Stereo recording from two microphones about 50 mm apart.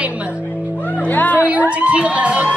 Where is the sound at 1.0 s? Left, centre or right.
Left.